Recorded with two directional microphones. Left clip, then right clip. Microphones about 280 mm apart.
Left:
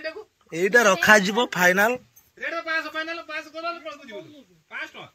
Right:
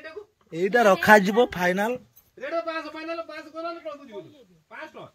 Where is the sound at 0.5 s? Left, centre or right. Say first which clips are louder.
Left 1 dB; centre.